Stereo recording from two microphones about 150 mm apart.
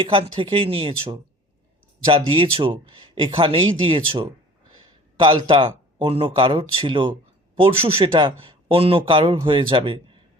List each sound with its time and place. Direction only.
0.0 s speech: 35° right (ahead or behind)
5.5 s speech: 35° right (ahead or behind)